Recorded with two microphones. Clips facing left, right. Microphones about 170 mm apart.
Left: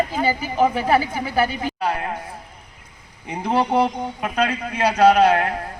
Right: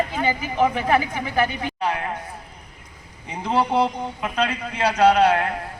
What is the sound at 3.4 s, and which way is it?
Speech, 15° left (ahead or behind).